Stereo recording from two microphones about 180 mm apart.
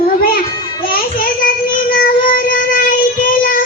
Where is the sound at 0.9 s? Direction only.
50° left (ahead or behind).